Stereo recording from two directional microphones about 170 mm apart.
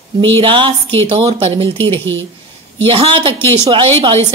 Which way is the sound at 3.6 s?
30° right (ahead or behind).